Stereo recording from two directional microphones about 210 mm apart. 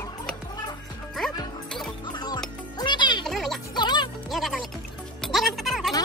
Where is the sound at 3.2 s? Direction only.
Centre (ahead or behind).